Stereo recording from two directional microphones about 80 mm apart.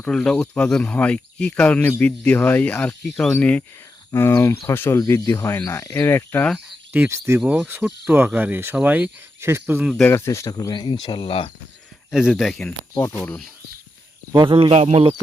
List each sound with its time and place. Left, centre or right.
0.1 s speech: centre
4.1 s speech: left
4.9 s speech: left
6.9 s speech: centre
10.1 s speech: left
10.5 s speech: left
12.1 s speech: centre
14.3 s speech: right